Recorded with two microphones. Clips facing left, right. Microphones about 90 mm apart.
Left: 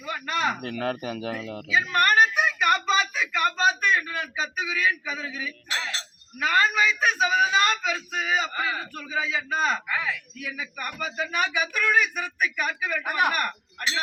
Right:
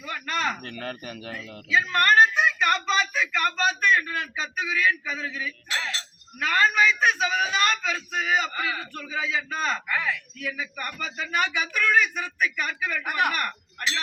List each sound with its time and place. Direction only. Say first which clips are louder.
0.0 s speech: left 1 dB; 15° left (ahead or behind)
0.6 s speech: left 6 dB; 90° left
1.7 s a sound: right 1 dB; 10° left (ahead or behind)
6.4 s a man's voice: right 1 dB; 10° left (ahead or behind)